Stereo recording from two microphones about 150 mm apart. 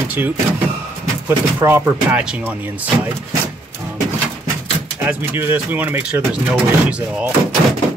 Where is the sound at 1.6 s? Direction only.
15° right (ahead or behind).